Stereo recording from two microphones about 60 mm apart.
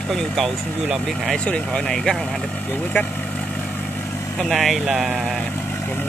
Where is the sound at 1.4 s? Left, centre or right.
Centre.